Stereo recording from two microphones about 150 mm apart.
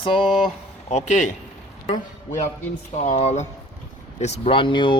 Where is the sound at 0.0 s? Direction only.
35° left (ahead or behind).